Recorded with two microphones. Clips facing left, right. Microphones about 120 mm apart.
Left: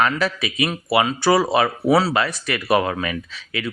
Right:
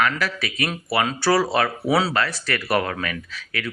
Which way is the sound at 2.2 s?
15° left (ahead or behind).